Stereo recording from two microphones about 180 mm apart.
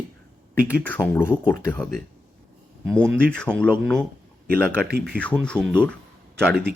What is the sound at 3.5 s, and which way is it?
Speech, 20° left (ahead or behind).